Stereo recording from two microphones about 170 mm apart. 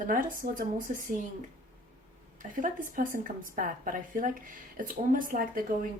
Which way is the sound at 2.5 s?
50° right (ahead or behind).